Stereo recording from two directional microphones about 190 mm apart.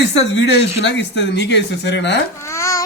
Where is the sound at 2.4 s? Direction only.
15° left (ahead or behind).